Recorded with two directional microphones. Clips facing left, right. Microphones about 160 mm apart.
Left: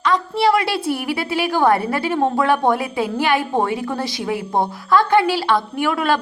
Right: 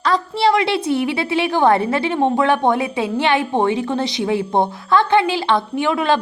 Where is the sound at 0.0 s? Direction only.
30° right (ahead or behind).